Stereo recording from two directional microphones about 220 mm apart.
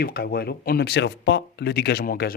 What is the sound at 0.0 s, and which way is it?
Speech, 45° left (ahead or behind).